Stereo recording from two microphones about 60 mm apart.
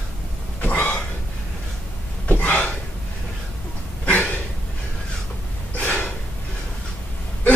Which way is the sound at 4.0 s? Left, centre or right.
Left.